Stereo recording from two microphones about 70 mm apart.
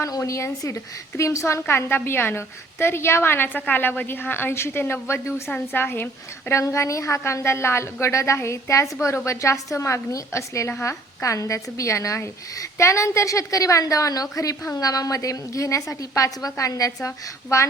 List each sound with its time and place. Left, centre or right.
0.2 s a woman's voice: left
1.6 s a woman's voice: left
6.5 s a woman's voice: left